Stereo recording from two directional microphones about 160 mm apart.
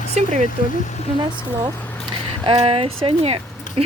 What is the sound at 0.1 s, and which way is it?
Speech, 50° right (ahead or behind).